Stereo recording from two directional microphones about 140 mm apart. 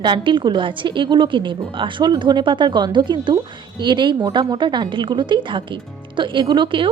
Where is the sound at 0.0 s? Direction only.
35° right (ahead or behind).